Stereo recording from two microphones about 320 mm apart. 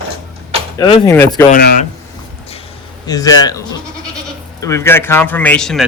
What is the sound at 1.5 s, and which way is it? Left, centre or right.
Speech, left.